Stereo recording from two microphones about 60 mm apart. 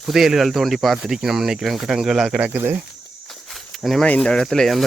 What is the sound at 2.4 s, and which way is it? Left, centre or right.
Speech, right.